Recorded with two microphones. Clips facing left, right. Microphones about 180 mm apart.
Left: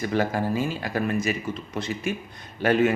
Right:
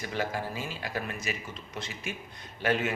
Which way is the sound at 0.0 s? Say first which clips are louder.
Left 8 dB; 50° left (ahead or behind).